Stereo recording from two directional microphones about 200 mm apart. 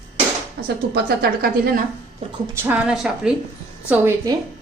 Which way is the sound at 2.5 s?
10° right (ahead or behind).